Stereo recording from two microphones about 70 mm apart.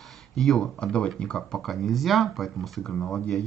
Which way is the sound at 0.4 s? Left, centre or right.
Centre.